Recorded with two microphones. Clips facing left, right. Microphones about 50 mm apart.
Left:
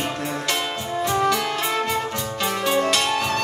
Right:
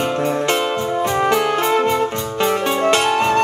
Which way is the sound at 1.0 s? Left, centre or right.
Right.